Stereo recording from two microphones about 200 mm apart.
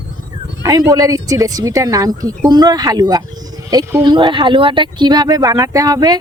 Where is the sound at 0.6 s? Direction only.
20° right (ahead or behind).